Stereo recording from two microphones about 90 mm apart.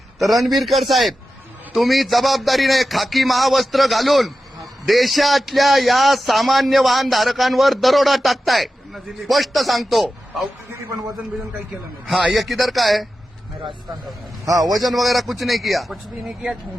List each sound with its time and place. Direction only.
0.2 s a man's voice: centre (ahead or behind)
12.0 s a man's voice: centre (ahead or behind)
14.4 s a man's voice: 40° right (ahead or behind)
14.7 s a man's voice: centre (ahead or behind)